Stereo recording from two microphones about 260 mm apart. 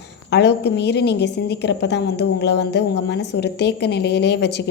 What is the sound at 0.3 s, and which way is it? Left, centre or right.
Speech, left.